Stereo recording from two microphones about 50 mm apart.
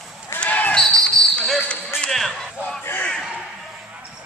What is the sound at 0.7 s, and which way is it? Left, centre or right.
Basketball bounce, centre.